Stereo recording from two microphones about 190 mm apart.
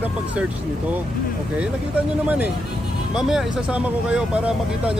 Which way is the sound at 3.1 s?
5° right (ahead or behind).